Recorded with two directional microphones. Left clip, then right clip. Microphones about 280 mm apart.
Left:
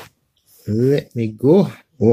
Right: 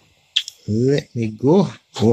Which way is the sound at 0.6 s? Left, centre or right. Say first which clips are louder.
Left 6 dB; centre.